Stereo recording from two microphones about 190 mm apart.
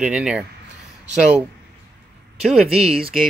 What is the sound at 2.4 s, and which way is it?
Speech, centre (ahead or behind).